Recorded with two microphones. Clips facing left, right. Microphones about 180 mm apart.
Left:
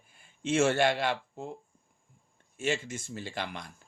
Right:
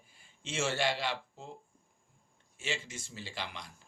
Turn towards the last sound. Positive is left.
turn(degrees=50)  # may be behind; listen again after turning